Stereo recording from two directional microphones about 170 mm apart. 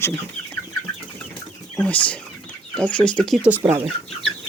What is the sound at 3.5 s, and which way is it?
Speech, 10° right (ahead or behind).